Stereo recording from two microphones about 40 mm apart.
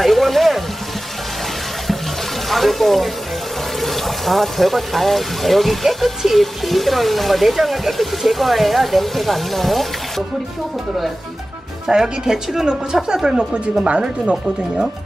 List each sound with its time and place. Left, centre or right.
0.0 s a sound: centre
2.5 s speech: centre
11.9 s speech: centre